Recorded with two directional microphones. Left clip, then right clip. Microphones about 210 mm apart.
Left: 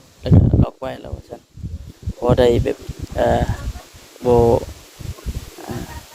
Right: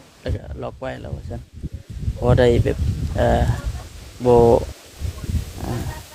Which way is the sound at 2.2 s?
20° left (ahead or behind).